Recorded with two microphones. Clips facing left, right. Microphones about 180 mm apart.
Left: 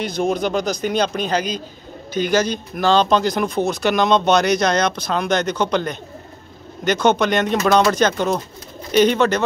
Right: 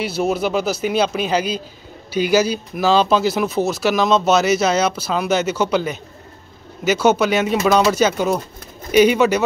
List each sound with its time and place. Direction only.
0.0 s speech: 5° right (ahead or behind)